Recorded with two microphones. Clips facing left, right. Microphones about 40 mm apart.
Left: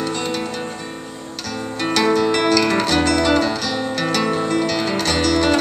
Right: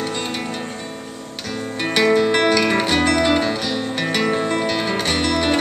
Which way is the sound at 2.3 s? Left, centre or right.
Right.